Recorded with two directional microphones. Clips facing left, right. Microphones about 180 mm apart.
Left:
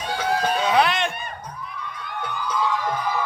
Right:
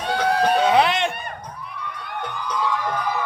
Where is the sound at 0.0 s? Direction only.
60° right (ahead or behind).